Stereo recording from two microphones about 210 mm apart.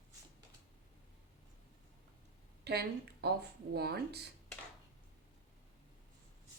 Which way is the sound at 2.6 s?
50° right (ahead or behind).